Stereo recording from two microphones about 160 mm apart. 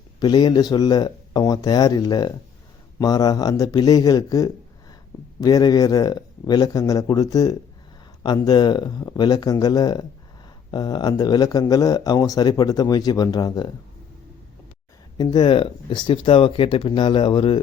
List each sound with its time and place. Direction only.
0.2 s speech: 25° left (ahead or behind)
15.2 s speech: 25° left (ahead or behind)